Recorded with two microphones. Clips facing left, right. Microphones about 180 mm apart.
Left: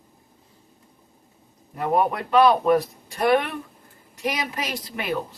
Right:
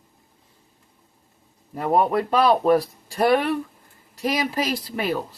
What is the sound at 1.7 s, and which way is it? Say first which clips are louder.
Speech: right 2 dB; 30° right (ahead or behind).